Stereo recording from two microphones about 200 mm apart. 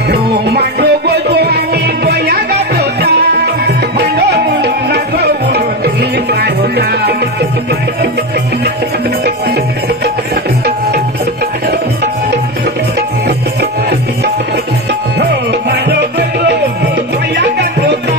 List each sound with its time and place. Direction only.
0.1 s music: 55° right (ahead or behind)
15.7 s music: 55° right (ahead or behind)